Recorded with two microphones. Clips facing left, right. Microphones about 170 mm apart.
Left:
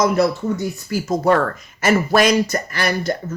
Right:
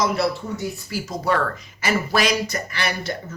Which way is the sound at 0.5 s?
50° left (ahead or behind).